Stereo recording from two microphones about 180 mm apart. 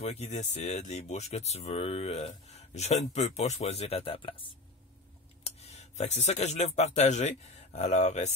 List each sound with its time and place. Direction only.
0.0 s speech: 35° left (ahead or behind)
5.6 s speech: 35° left (ahead or behind)